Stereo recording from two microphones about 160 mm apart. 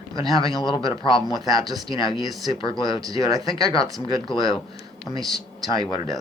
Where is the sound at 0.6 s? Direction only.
30° left (ahead or behind).